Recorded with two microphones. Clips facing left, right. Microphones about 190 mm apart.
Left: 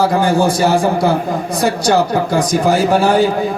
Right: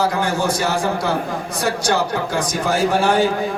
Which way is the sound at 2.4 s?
35° left (ahead or behind).